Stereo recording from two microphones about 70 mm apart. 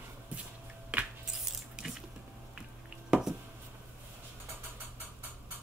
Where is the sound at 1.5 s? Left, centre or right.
Centre.